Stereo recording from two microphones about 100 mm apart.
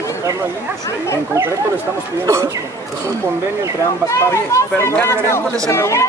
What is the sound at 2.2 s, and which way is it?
Speech, 30° right (ahead or behind).